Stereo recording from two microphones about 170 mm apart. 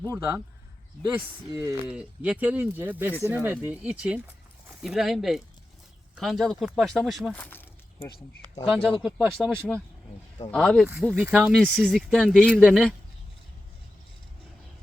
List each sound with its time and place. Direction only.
0.1 s speech: 20° right (ahead or behind); by 7.3 s centre (ahead or behind)
7.3 s speech: 10° left (ahead or behind)
9.0 s speech: centre (ahead or behind)